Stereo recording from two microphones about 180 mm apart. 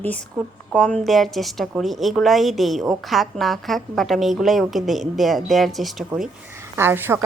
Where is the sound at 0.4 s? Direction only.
Centre (ahead or behind).